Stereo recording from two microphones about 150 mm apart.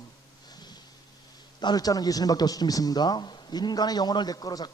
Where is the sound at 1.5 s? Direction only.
25° left (ahead or behind).